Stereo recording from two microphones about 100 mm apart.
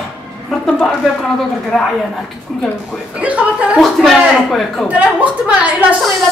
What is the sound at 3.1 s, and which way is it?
Speech, 15° right (ahead or behind).